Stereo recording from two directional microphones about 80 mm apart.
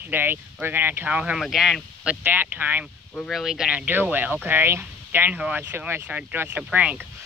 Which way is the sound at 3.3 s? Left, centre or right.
Centre.